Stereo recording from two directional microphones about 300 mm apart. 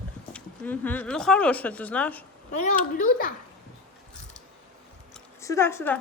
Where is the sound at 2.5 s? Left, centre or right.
Left.